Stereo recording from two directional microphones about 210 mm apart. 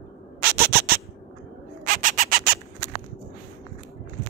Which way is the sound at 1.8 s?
40° right (ahead or behind).